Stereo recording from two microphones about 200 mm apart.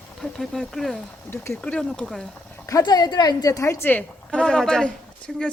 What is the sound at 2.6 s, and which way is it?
A woman's voice, 20° left (ahead or behind).